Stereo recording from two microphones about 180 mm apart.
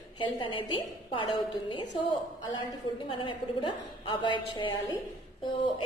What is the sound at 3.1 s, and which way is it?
A woman's voice, 25° left (ahead or behind).